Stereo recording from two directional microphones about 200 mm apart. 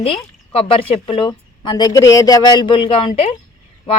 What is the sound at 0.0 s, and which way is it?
A woman's voice, 30° left (ahead or behind).